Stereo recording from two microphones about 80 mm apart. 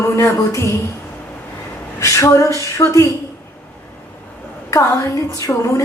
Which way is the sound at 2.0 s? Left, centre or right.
Left.